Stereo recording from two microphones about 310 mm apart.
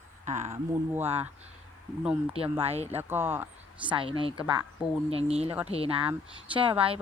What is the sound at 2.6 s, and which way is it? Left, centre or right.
Speech, centre.